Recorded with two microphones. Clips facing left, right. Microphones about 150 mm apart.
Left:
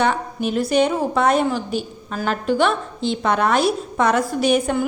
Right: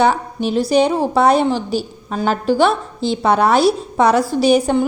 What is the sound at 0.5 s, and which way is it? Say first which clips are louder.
A woman's voice: right 4 dB; 35° right (ahead or behind).